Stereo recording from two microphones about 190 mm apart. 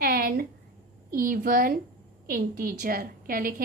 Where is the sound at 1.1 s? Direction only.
50° right (ahead or behind).